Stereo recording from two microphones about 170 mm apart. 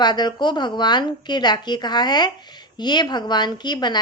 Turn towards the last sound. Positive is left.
turn(degrees=25)  # may be behind; listen again after turning